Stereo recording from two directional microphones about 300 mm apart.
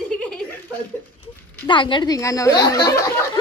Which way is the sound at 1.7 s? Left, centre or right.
Centre.